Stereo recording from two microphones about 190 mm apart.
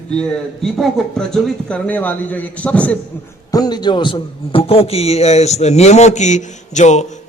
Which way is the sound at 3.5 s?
20° left (ahead or behind).